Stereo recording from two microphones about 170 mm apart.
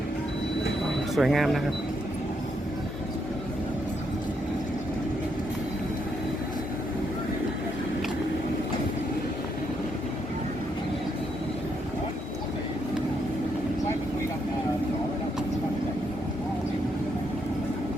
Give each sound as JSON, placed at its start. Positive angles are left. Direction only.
{"t": 1.1, "sound": "speech", "side_deg": 0}